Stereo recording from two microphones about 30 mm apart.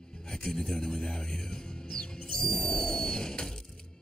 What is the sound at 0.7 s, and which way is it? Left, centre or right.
Speech, left.